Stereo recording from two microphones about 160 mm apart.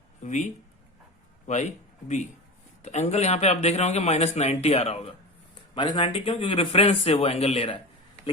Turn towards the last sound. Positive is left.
turn(degrees=35)  # may be behind; listen again after turning